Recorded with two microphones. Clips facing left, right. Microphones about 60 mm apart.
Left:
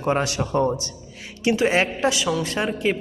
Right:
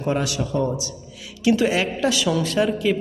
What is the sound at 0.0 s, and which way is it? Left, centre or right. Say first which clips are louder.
Speech: left 1 dB; left.